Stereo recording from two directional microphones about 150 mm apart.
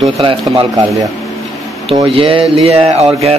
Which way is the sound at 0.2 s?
35° right (ahead or behind).